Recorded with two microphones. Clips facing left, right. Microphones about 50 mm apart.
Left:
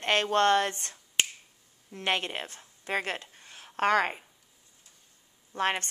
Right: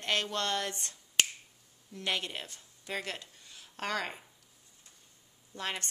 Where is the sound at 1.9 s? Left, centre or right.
Left.